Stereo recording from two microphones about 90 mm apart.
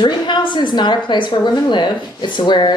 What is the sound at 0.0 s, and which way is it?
A woman's voice, 60° left (ahead or behind).